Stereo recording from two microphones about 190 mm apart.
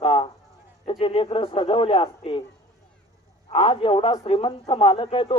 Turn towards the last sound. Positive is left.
turn(degrees=30)  # may be behind; listen again after turning